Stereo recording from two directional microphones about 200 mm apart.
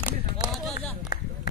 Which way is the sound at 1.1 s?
50° left (ahead or behind).